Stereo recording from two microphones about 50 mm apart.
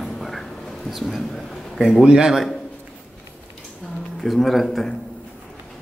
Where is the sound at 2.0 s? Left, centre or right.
Centre.